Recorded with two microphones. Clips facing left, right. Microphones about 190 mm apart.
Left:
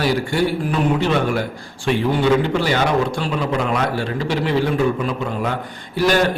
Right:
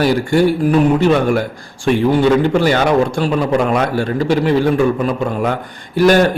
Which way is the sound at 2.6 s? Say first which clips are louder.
Right 5 dB; 45° right (ahead or behind).